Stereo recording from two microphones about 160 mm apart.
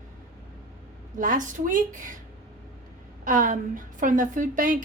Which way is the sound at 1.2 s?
55° right (ahead or behind).